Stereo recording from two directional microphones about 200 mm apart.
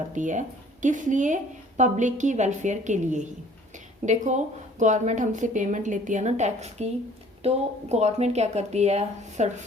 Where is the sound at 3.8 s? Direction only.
40° right (ahead or behind).